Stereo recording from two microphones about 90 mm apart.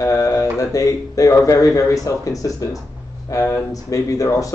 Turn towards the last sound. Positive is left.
turn(degrees=35)  # may be behind; listen again after turning